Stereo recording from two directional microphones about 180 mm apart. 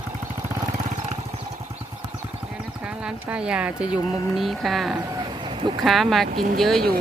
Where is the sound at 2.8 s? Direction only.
5° right (ahead or behind).